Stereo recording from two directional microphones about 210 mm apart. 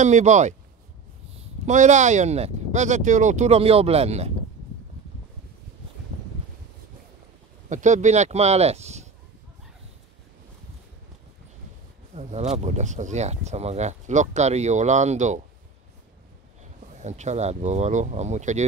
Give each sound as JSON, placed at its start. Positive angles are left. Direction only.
{"t": 0.0, "sound": "speech", "side_deg": -35}
{"t": 1.7, "sound": "speech", "side_deg": -35}
{"t": 7.7, "sound": "speech", "side_deg": -35}
{"t": 12.2, "sound": "speech", "side_deg": -35}
{"t": 16.9, "sound": "speech", "side_deg": -35}